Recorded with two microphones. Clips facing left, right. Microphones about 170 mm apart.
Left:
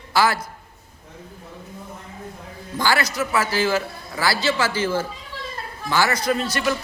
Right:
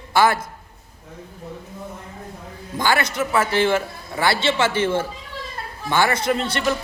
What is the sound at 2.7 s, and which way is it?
A man's voice, 25° right (ahead or behind).